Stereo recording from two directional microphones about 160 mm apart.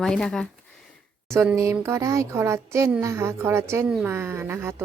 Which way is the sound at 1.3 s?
15° right (ahead or behind).